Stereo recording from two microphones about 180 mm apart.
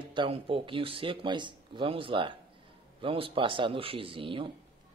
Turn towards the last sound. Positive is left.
turn(degrees=-30)  # may be behind; listen again after turning